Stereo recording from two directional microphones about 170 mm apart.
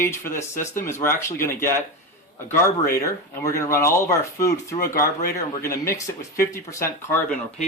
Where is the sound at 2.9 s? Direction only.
15° left (ahead or behind).